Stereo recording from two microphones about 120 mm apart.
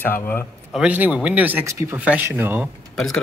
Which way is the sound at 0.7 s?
10° right (ahead or behind).